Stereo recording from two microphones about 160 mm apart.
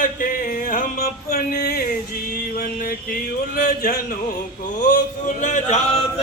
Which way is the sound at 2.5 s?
70° left (ahead or behind).